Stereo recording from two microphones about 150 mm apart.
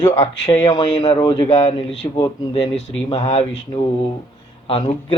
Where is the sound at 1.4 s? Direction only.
40° left (ahead or behind).